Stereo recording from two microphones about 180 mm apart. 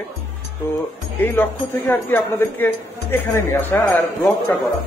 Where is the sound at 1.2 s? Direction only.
10° left (ahead or behind).